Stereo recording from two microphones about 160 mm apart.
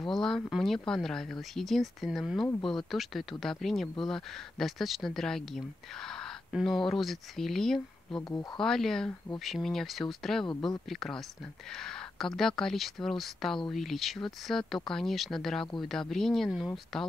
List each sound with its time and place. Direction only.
0.1 s speech: centre (ahead or behind)
8.2 s speech: 20° left (ahead or behind)
8.5 s speech: centre (ahead or behind)